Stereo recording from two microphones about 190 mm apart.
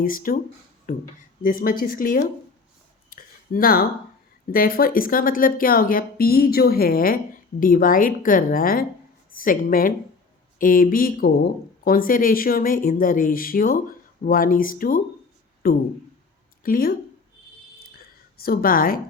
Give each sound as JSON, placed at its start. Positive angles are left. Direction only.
{"t": 0.0, "sound": "speech", "side_deg": 50}
{"t": 3.1, "sound": "a sound", "side_deg": 45}
{"t": 4.5, "sound": "speech", "side_deg": 50}
{"t": 18.3, "sound": "speech", "side_deg": 50}